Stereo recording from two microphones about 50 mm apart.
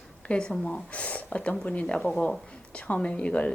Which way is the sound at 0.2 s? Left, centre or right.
Centre.